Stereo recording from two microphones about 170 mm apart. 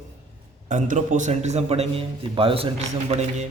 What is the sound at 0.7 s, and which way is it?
A man's voice, 45° right (ahead or behind).